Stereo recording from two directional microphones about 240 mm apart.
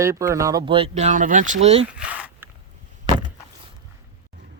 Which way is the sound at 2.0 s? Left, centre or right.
Centre.